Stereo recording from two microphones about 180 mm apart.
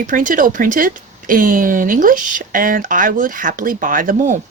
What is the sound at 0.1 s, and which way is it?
Speech, 45° right (ahead or behind).